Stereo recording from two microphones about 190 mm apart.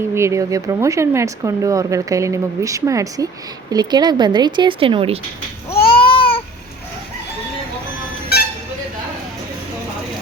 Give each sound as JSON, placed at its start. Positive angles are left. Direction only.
{"t": 0.1, "sound": "speech", "side_deg": -15}
{"t": 5.9, "sound": "babbling", "side_deg": 30}